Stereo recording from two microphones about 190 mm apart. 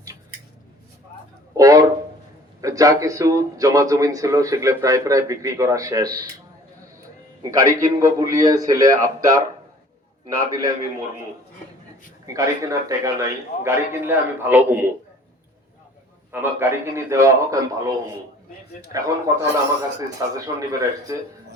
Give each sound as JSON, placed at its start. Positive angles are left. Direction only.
{"t": 1.5, "sound": "a sound", "side_deg": -20}
{"t": 2.6, "sound": "speech", "side_deg": -20}
{"t": 7.5, "sound": "a man's voice", "side_deg": -15}
{"t": 12.2, "sound": "speech", "side_deg": -15}
{"t": 16.3, "sound": "speech", "side_deg": -10}